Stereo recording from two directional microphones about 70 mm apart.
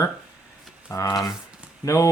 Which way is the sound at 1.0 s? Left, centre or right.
Left.